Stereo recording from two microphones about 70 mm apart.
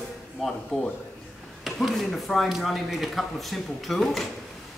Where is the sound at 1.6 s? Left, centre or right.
Centre.